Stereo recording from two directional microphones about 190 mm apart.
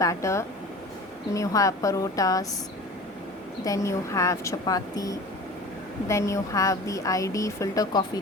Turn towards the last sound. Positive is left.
turn(degrees=15)  # may be behind; listen again after turning